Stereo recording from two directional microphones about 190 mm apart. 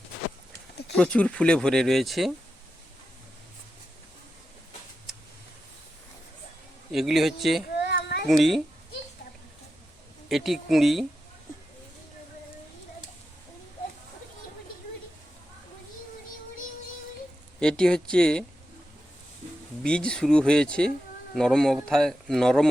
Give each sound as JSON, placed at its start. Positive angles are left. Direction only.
{"t": 0.9, "sound": "speech", "side_deg": 5}
{"t": 6.9, "sound": "speech", "side_deg": 0}
{"t": 7.8, "sound": "child singing", "side_deg": 60}
{"t": 8.3, "sound": "speech", "side_deg": 0}
{"t": 10.2, "sound": "speech", "side_deg": 0}
{"t": 17.6, "sound": "speech", "side_deg": 5}
{"t": 19.8, "sound": "speech", "side_deg": 5}